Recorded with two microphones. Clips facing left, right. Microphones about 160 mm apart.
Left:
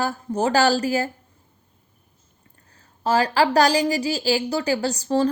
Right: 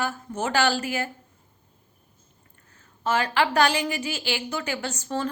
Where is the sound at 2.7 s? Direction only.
35° left (ahead or behind).